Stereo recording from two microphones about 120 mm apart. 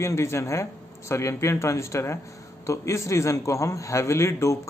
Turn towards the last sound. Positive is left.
turn(degrees=25)  # may be behind; listen again after turning